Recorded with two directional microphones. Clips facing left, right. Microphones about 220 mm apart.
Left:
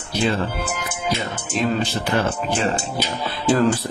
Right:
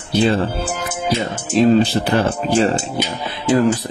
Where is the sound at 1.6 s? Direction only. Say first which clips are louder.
Right 9 dB; 30° right (ahead or behind).